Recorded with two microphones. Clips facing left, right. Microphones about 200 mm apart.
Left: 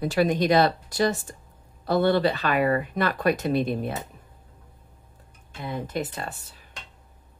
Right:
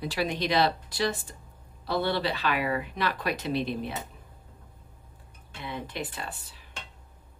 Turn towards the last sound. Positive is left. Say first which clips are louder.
# left 4 dB
turn(degrees=45)  # may be behind; listen again after turning